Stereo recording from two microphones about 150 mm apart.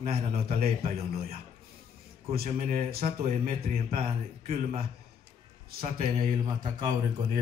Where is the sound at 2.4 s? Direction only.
45° right (ahead or behind).